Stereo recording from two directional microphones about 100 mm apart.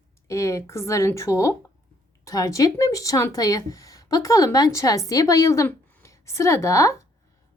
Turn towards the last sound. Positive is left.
turn(degrees=30)  # may be behind; listen again after turning